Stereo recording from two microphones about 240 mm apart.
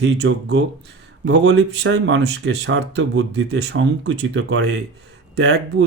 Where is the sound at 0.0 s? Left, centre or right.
Right.